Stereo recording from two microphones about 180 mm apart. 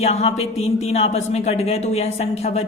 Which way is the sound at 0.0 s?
35° left (ahead or behind).